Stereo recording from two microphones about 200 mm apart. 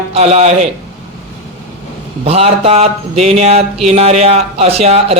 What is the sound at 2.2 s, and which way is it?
Speech, 30° right (ahead or behind).